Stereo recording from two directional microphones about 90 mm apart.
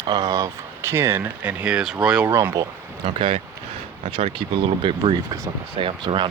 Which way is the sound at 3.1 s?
75° right (ahead or behind).